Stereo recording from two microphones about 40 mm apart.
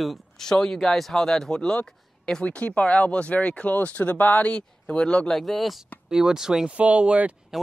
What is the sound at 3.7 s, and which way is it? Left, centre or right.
Speech, left.